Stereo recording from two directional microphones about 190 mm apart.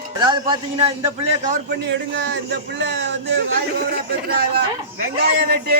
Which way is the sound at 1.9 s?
65° right (ahead or behind).